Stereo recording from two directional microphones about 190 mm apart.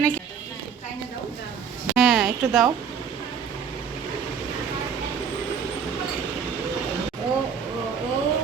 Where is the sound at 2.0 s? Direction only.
Centre (ahead or behind).